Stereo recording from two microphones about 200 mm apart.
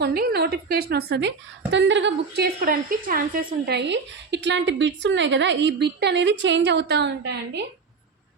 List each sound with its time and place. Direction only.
0.0 s a woman's voice: 50° right (ahead or behind)
1.7 s a woman's voice: 65° right (ahead or behind); by 3.4 s 45° right (ahead or behind)
3.7 s a woman's voice: 60° right (ahead or behind)